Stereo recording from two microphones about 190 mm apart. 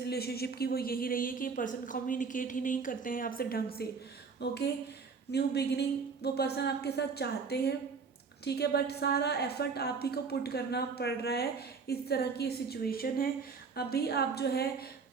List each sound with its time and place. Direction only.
0.0 s a woman's voice: 55° left (ahead or behind)